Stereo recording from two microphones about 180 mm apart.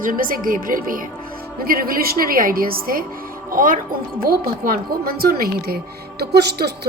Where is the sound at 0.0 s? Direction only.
50° right (ahead or behind).